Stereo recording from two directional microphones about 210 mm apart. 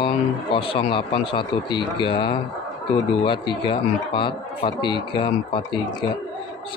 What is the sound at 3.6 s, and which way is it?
Speech, 25° left (ahead or behind).